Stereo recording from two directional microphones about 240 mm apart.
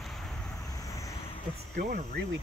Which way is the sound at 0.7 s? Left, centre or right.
Centre.